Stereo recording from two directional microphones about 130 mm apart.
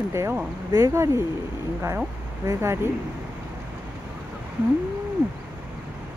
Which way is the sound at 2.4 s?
20° right (ahead or behind).